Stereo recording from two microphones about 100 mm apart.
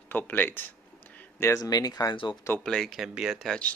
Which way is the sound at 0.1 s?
20° left (ahead or behind).